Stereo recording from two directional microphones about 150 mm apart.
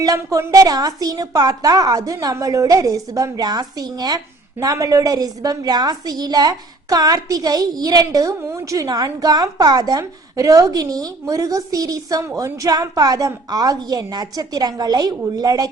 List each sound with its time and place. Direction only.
0.0 s a woman's voice: 25° right (ahead or behind)